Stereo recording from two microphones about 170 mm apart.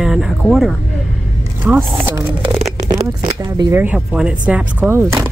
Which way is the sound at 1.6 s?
10° right (ahead or behind).